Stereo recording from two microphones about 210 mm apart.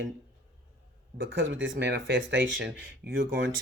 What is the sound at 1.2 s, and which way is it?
Speech, 60° right (ahead or behind).